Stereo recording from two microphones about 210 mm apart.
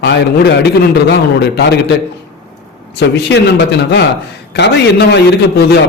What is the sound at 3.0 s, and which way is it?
Speech, 55° left (ahead or behind).